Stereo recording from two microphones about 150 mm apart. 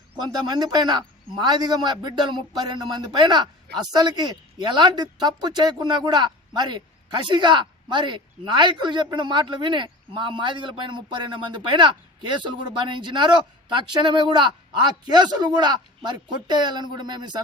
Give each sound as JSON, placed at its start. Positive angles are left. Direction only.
{"t": 0.2, "sound": "a man's voice", "side_deg": -25}